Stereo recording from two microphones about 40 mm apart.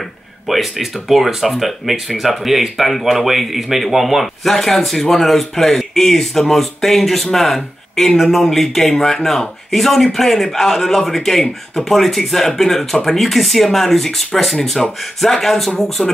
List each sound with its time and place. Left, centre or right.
0.5 s speech: centre
16.0 s speech: left